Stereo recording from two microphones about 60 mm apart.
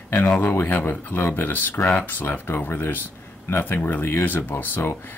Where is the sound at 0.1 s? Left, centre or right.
Left.